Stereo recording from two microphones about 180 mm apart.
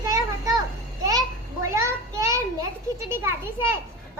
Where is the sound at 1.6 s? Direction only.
15° right (ahead or behind).